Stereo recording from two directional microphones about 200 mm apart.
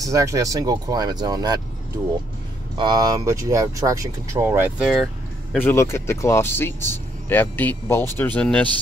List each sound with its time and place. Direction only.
0.0 s speech: 15° right (ahead or behind)
2.8 s speech: 20° right (ahead or behind); by 5.0 s 5° right (ahead or behind)
5.5 s speech: 10° left (ahead or behind)